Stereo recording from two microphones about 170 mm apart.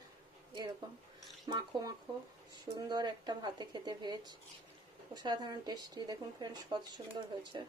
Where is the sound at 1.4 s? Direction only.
25° right (ahead or behind).